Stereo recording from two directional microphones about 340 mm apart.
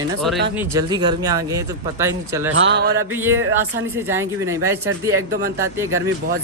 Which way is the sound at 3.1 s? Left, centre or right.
Centre.